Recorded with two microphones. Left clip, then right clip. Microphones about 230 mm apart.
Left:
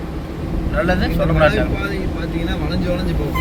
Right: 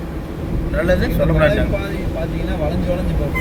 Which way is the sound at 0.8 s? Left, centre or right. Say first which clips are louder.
Right 1 dB; right.